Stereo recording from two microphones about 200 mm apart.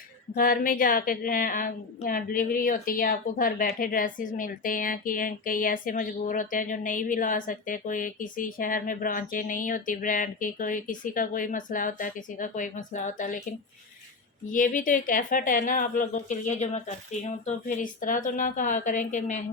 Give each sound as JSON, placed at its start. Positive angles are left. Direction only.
{"t": 0.3, "sound": "a woman's voice", "side_deg": 45}
{"t": 14.5, "sound": "speech", "side_deg": 40}